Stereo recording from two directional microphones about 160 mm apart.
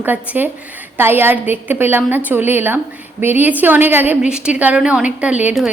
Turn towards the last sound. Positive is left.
turn(degrees=-5)  # may be behind; listen again after turning